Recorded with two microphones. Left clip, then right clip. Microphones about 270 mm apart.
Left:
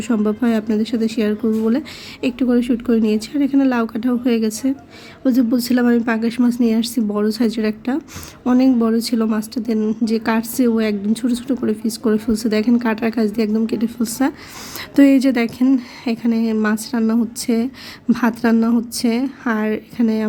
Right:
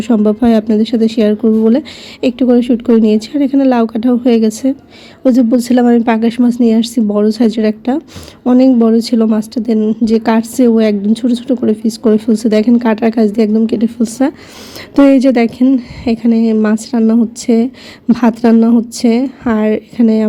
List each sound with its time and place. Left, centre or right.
0.0 s speech: centre